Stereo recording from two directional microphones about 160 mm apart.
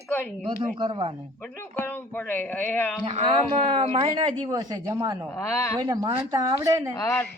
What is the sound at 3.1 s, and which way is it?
Speech, 40° right (ahead or behind).